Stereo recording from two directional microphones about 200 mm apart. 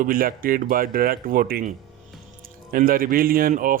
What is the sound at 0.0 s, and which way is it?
Speech, 45° right (ahead or behind).